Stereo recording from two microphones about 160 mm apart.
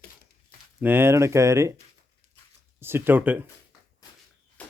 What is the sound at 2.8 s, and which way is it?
Speech, 15° right (ahead or behind).